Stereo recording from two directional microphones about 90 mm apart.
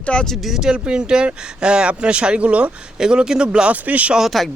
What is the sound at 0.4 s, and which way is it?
Speech, 5° right (ahead or behind).